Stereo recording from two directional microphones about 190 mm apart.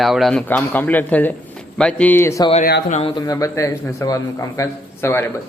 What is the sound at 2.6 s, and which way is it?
Speech, 50° left (ahead or behind).